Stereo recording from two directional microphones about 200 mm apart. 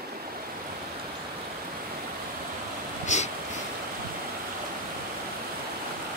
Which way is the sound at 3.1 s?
35° left (ahead or behind).